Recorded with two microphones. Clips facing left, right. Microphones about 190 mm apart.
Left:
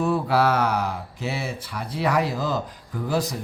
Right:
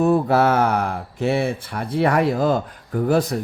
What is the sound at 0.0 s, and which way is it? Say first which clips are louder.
Speech: right 5 dB; 45° right (ahead or behind).